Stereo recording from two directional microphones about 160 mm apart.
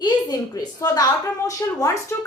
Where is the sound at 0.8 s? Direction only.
25° left (ahead or behind).